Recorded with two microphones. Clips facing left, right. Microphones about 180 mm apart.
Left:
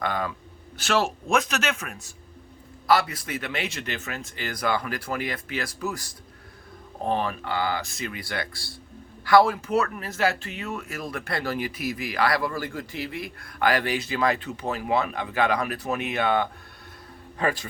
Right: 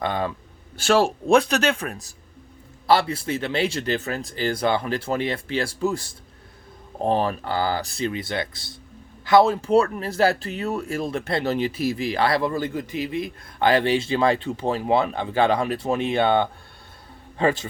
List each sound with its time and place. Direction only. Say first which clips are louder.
0.0 s speech: right 3 dB; 25° right (ahead or behind)